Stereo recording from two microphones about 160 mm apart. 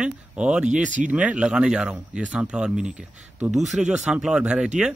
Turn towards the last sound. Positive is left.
turn(degrees=-5)  # may be behind; listen again after turning